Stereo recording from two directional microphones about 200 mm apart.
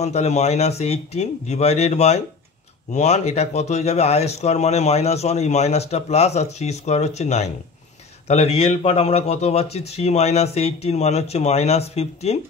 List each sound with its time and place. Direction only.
0.0 s speech: 35° left (ahead or behind)